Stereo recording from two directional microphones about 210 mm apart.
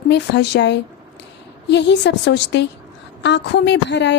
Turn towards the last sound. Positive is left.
turn(degrees=55)  # may be behind; listen again after turning